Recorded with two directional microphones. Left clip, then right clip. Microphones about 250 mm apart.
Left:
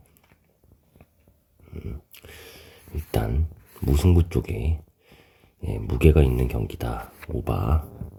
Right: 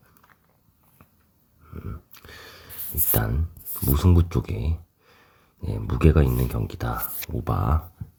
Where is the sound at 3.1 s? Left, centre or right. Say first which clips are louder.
Left 1 dB; centre.